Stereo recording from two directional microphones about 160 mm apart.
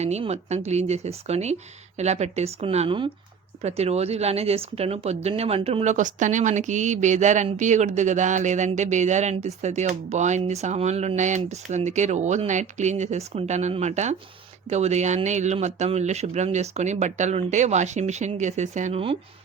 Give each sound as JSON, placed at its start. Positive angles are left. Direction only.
{"t": 0.0, "sound": "speech", "side_deg": -45}